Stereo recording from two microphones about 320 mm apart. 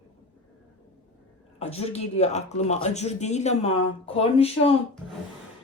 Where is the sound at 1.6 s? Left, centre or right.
Centre.